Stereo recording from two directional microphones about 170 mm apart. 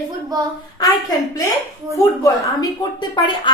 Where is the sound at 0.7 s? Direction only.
20° left (ahead or behind).